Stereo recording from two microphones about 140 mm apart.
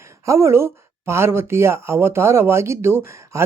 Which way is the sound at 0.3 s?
20° right (ahead or behind).